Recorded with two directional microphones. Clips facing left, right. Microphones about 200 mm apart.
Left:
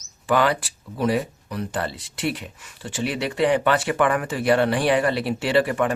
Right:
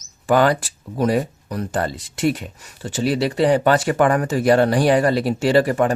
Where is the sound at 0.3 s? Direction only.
45° right (ahead or behind).